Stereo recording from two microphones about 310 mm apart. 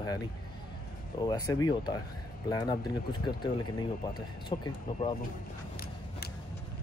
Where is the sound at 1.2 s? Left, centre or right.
Centre.